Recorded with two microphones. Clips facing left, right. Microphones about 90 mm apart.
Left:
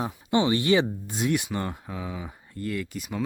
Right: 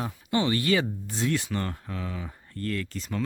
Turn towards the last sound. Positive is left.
turn(degrees=10)  # may be behind; listen again after turning